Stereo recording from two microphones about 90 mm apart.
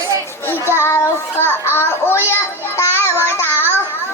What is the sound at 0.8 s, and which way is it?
Child singing, 30° left (ahead or behind).